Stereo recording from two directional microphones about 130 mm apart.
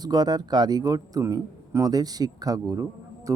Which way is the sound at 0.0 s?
30° right (ahead or behind).